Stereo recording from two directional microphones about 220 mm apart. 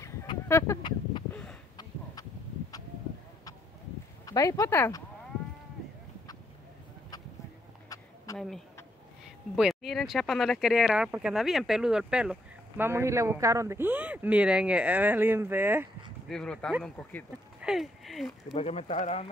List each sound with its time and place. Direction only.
0.0 s fowl: 10° left (ahead or behind)
1.3 s a sound: 5° left (ahead or behind)
4.3 s speech: 15° left (ahead or behind)
7.9 s a sound: 15° left (ahead or behind)
8.4 s speech: centre (ahead or behind)
16.3 s speech: 5° left (ahead or behind)
18.4 s speech: 30° left (ahead or behind)